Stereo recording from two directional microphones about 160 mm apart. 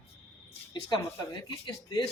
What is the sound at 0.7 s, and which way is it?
Speech, 25° left (ahead or behind).